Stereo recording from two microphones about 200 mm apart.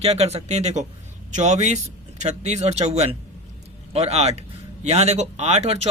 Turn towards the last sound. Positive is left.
turn(degrees=-30)  # may be behind; listen again after turning